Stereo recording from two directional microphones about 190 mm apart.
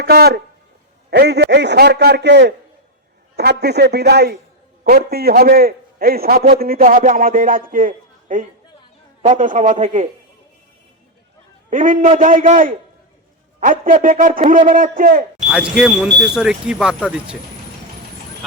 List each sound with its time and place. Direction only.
0.0 s a man's voice: 55° right (ahead or behind); by 10.1 s 40° right (ahead or behind)
11.7 s a man's voice: 45° right (ahead or behind)
15.4 s speech: 5° right (ahead or behind)